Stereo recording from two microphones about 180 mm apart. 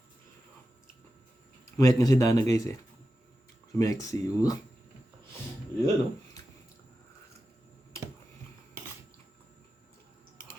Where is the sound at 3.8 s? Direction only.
20° left (ahead or behind).